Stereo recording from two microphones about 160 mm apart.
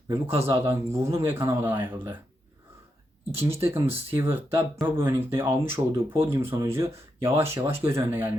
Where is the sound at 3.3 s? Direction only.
15° right (ahead or behind).